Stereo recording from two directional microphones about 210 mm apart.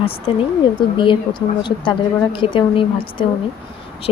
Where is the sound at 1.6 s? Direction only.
20° left (ahead or behind).